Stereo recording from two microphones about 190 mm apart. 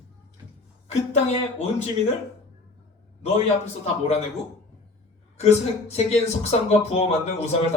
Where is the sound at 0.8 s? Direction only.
35° left (ahead or behind).